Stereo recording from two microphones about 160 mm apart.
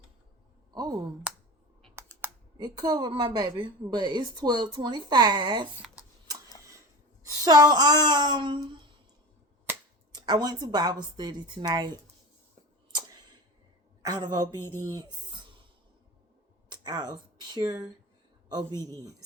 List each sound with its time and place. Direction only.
0.7 s a sound: 25° right (ahead or behind)
1.3 s finger snapping: 5° right (ahead or behind)
2.2 s computer keyboard: 15° right (ahead or behind)
2.6 s a woman's voice: 25° right (ahead or behind)
5.8 s a sound: centre (ahead or behind)
6.6 s a sound: 20° right (ahead or behind)
7.3 s a woman's voice: 25° right (ahead or behind)
10.1 s a woman's voice: 25° right (ahead or behind)
14.0 s a woman's voice: 25° right (ahead or behind)
16.6 s a man's voice: 25° right (ahead or behind)